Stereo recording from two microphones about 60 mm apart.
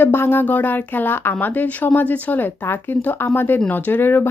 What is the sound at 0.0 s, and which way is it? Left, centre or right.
Speech, left.